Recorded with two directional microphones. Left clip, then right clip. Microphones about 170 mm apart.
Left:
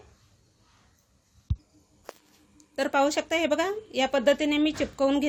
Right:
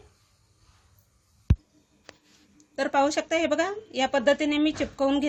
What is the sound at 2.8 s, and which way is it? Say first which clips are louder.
A woman's voice: right 1 dB; 35° left (ahead or behind).